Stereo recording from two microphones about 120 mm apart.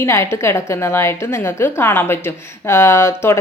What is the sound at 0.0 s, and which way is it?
A woman's voice, 25° left (ahead or behind).